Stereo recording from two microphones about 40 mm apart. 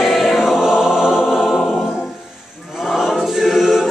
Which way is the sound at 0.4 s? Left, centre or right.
Centre.